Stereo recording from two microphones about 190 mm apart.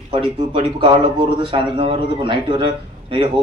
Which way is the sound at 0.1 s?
25° right (ahead or behind).